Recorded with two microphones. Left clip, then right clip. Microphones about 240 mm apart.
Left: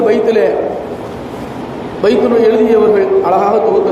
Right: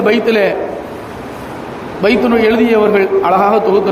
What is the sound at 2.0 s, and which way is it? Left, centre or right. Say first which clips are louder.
A man's voice: left 1 dB; right.